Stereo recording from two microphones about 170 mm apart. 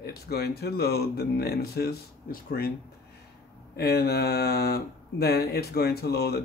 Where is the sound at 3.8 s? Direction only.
70° left (ahead or behind).